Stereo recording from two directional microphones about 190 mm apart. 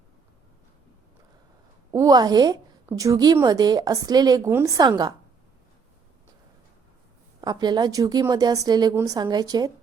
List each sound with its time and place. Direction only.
1.9 s a woman's voice: 20° right (ahead or behind)
7.4 s a woman's voice: 20° right (ahead or behind)